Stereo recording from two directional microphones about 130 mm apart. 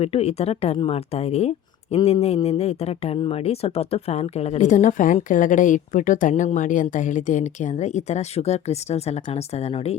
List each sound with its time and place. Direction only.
0.0 s speech: 50° left (ahead or behind)